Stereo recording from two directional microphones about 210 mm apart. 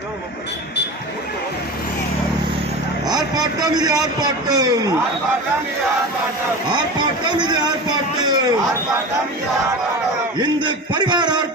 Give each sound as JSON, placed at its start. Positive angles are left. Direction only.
{"t": 3.1, "sound": "a man's voice", "side_deg": -20}
{"t": 7.3, "sound": "a man's voice", "side_deg": -20}
{"t": 10.3, "sound": "a man's voice", "side_deg": -20}